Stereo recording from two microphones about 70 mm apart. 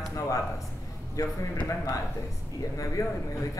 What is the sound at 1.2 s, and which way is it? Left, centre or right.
Speech, left.